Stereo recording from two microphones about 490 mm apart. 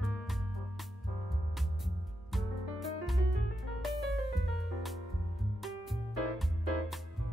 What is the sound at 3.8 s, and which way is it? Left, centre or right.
Music, centre.